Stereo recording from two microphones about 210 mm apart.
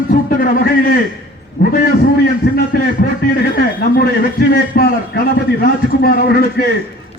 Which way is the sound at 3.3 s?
45° left (ahead or behind).